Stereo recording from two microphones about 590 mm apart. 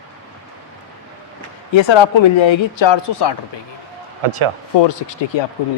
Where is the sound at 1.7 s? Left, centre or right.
Left.